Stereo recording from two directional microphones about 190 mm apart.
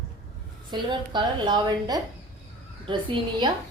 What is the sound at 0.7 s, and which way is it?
A woman's voice, 25° right (ahead or behind).